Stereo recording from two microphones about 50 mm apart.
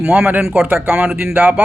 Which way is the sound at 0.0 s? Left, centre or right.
Centre.